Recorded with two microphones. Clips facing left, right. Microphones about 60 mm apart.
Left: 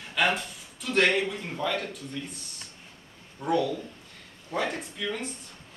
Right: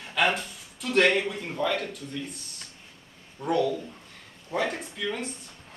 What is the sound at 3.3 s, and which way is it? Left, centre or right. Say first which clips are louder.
Speech: right 1 dB; centre.